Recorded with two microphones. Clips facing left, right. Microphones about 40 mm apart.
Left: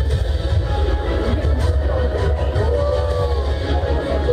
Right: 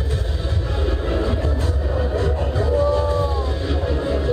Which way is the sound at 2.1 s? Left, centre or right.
Left.